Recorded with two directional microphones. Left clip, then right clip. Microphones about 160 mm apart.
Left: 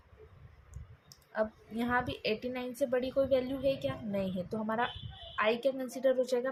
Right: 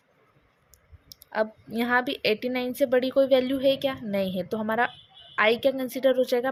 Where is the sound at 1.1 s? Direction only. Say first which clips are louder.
Right 7 dB; 50° right (ahead or behind).